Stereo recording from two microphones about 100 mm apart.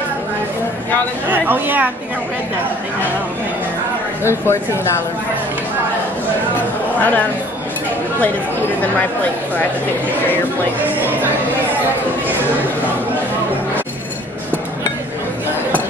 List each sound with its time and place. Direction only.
1.3 s speech: 20° right (ahead or behind)
4.2 s speech: 25° left (ahead or behind)
7.0 s speech: 15° left (ahead or behind)